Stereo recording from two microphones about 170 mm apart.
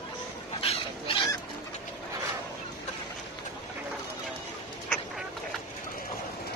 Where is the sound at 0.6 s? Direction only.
35° left (ahead or behind).